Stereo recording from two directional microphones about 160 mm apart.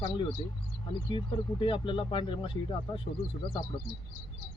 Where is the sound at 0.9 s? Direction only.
30° left (ahead or behind).